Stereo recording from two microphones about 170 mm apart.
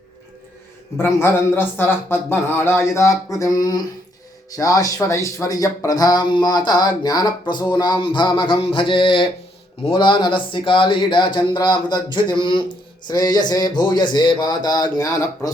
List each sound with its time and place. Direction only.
0.9 s a man's voice: 15° left (ahead or behind)